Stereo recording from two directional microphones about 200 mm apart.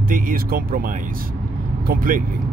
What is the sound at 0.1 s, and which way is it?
Speech, 45° right (ahead or behind).